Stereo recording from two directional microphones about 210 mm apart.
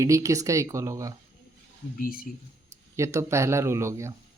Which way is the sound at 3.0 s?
15° right (ahead or behind).